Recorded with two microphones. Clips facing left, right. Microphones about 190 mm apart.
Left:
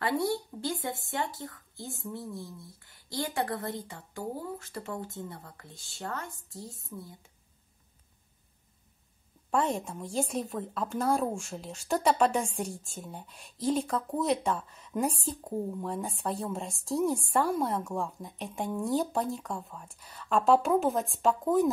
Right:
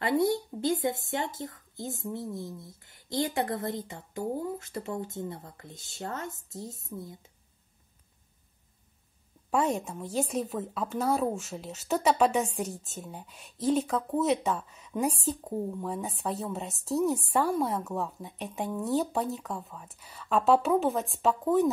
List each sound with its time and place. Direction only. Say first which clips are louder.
0.0 s a woman's voice: right 3 dB; 20° right (ahead or behind)
9.5 s a woman's voice: right 1 dB; 10° right (ahead or behind)